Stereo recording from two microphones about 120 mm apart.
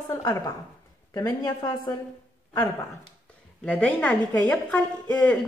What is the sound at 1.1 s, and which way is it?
Speech, 35° left (ahead or behind).